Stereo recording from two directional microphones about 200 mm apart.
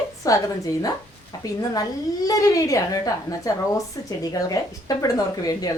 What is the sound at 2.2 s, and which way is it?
A woman's voice, 15° left (ahead or behind).